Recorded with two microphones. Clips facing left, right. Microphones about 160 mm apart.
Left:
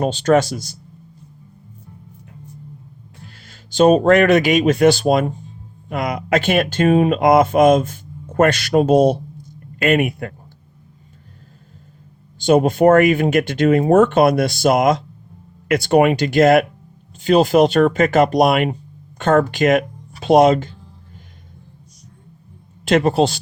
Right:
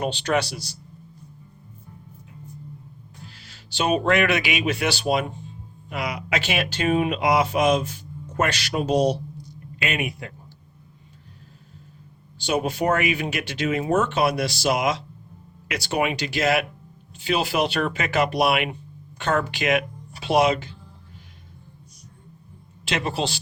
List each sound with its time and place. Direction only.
0.0 s speech: 45° left (ahead or behind)
3.4 s speech: 45° left (ahead or behind)
12.4 s speech: 50° left (ahead or behind)
22.9 s speech: 45° left (ahead or behind)